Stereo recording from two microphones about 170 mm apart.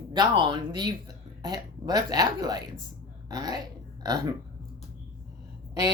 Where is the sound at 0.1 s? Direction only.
25° right (ahead or behind).